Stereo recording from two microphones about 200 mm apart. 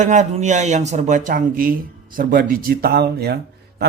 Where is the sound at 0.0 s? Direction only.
35° right (ahead or behind).